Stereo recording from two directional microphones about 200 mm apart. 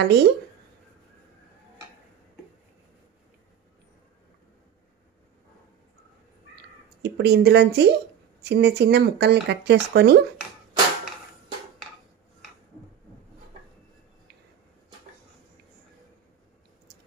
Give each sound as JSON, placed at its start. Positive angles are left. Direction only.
{"t": 0.0, "sound": "speech", "side_deg": -60}
{"t": 6.5, "sound": "a sound", "side_deg": -60}
{"t": 8.5, "sound": "speech", "side_deg": -55}